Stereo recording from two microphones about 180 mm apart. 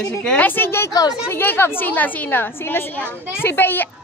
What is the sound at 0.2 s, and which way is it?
Speech, 5° left (ahead or behind).